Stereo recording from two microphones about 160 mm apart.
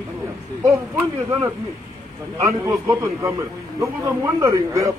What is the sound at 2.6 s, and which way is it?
Speech, 20° right (ahead or behind).